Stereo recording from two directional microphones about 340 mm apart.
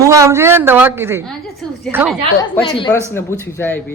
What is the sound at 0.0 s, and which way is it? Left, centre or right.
A woman's voice, centre.